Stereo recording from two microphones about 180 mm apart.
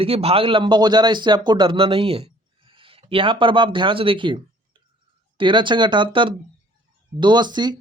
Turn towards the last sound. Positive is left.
turn(degrees=-25)  # may be behind; listen again after turning